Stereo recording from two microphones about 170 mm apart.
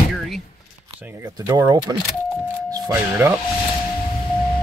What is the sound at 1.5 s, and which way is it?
Speech, 20° right (ahead or behind).